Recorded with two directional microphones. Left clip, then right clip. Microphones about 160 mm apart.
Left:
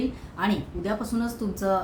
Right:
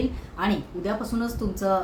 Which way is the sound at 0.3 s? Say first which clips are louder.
Even; 5° right (ahead or behind).